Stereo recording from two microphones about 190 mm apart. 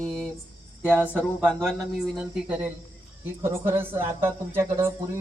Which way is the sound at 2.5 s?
5° right (ahead or behind).